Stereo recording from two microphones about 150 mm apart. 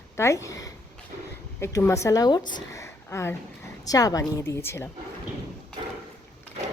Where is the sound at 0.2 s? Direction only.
20° left (ahead or behind).